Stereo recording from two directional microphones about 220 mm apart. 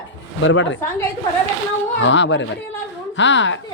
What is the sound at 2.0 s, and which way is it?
Speech, 55° left (ahead or behind).